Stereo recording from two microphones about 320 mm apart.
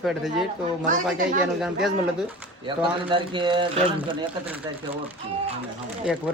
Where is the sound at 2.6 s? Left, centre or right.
Centre.